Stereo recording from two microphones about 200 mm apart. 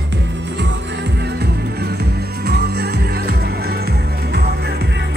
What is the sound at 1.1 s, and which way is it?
Music, 55° right (ahead or behind).